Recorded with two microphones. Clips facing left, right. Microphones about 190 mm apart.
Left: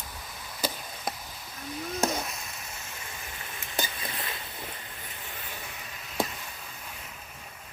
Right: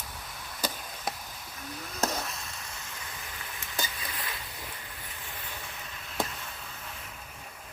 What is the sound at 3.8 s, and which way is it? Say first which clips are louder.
Stir: left 3 dB; 25° left (ahead or behind).